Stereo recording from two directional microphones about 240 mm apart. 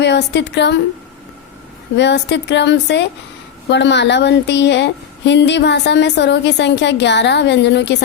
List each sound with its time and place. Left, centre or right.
0.0 s a woman's voice: left
2.0 s a woman's voice: left